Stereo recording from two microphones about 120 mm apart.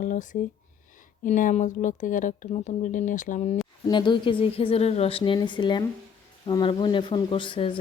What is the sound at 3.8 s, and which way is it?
Speech, 40° left (ahead or behind).